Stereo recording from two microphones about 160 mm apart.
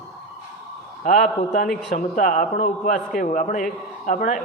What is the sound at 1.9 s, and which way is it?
Speech, 55° left (ahead or behind).